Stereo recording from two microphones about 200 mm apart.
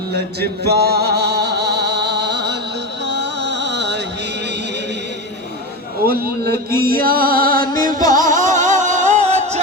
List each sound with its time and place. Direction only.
0.3 s music: 55° right (ahead or behind)
6.1 s a sound: 50° right (ahead or behind)
6.7 s music: 50° right (ahead or behind)
7.8 s music: 20° left (ahead or behind)
8.1 s music: 40° right (ahead or behind)